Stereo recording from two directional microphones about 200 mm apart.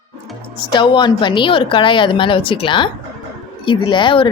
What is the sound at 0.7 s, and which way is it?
Speech, 20° left (ahead or behind).